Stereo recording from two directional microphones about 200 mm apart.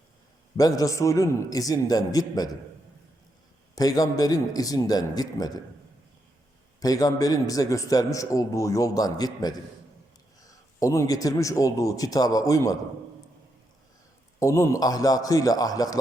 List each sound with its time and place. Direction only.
0.5 s a man's voice: 15° left (ahead or behind)
3.8 s a man's voice: 20° left (ahead or behind)
6.7 s a man's voice: 20° left (ahead or behind)
14.3 s a man's voice: 15° left (ahead or behind)